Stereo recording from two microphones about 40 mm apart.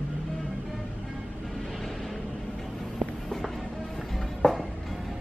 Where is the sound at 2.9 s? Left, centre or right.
Centre.